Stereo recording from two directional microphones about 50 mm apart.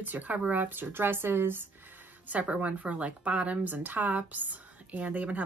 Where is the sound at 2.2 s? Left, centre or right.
Right.